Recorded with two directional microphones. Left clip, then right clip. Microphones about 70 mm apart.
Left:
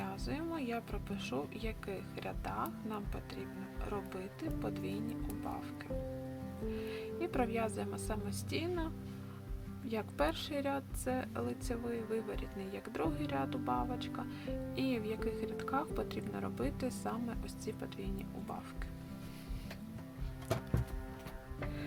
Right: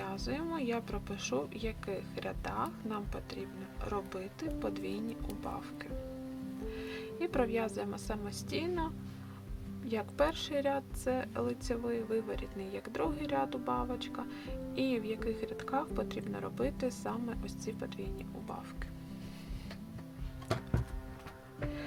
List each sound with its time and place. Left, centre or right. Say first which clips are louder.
0.3 s speech: right 4 dB; right
6.7 s speech: even; right
9.9 s speech: right 3 dB; right